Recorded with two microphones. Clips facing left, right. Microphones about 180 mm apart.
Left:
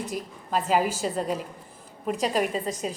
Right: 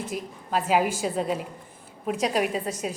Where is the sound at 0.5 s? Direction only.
5° right (ahead or behind).